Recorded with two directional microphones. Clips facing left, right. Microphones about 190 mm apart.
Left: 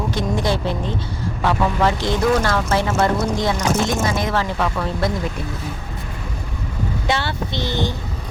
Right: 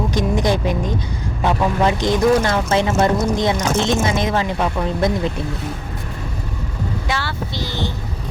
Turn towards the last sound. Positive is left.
turn(degrees=20)  # may be behind; listen again after turning